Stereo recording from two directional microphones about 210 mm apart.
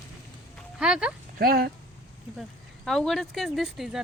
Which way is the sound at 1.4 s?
45° right (ahead or behind).